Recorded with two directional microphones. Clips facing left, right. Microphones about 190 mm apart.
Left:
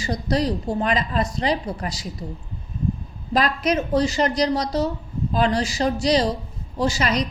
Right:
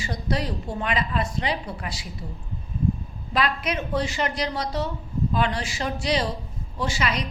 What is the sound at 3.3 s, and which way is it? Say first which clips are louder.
A woman's voice: left 5 dB; 40° left (ahead or behind).